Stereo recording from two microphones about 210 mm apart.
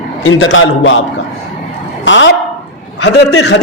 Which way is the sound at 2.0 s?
60° left (ahead or behind).